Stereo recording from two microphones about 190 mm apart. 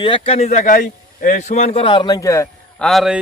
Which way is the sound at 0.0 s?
30° left (ahead or behind).